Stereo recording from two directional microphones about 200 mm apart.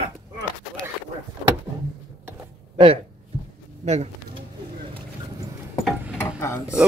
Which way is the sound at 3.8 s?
35° right (ahead or behind).